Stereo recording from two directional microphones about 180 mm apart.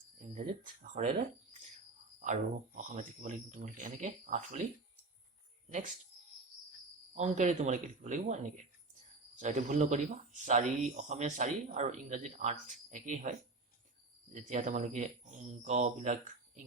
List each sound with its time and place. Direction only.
0.2 s speech: 40° right (ahead or behind)
2.1 s speech: 45° right (ahead or behind)
7.1 s speech: 40° right (ahead or behind)
14.3 s speech: 45° right (ahead or behind)